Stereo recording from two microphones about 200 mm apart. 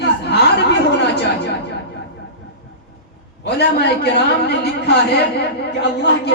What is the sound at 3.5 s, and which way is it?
A man's voice, 55° left (ahead or behind).